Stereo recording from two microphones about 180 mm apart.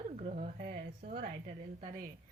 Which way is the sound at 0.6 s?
60° right (ahead or behind).